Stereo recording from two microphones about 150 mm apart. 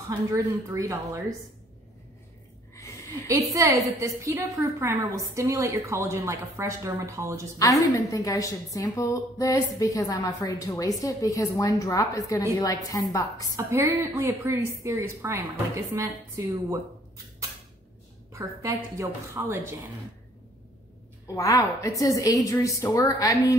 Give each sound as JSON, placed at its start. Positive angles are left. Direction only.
{"t": 0.3, "sound": "a woman's voice", "side_deg": -20}
{"t": 2.7, "sound": "a sound", "side_deg": 20}
{"t": 3.3, "sound": "a woman's voice", "side_deg": -20}
{"t": 7.8, "sound": "a woman's voice", "side_deg": 20}
{"t": 13.6, "sound": "a woman's voice", "side_deg": -15}
{"t": 18.3, "sound": "a woman's voice", "side_deg": -20}
{"t": 21.4, "sound": "a woman's voice", "side_deg": 25}